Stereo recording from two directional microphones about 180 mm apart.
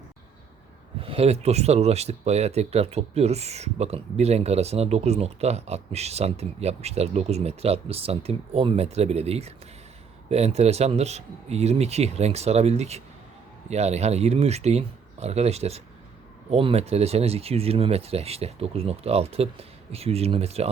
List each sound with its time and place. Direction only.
1.0 s speech: 30° right (ahead or behind)